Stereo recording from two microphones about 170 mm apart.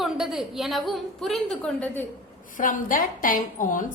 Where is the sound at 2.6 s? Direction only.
50° left (ahead or behind).